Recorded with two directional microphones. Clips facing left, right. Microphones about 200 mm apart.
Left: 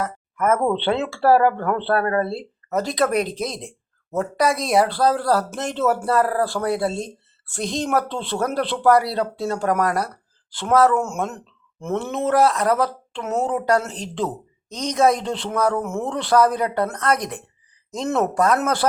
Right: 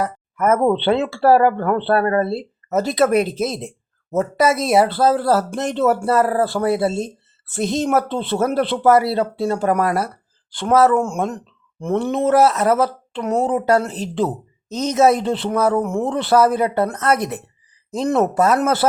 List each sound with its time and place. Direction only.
0.3 s speech: 5° right (ahead or behind)